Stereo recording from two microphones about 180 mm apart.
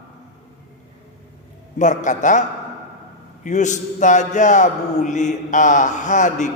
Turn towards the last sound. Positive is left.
turn(degrees=45)  # may be behind; listen again after turning